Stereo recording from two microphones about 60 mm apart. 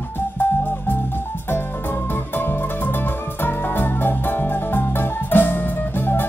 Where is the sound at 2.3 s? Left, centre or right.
Left.